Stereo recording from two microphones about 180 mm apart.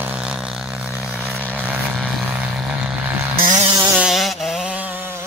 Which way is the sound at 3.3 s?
50° right (ahead or behind).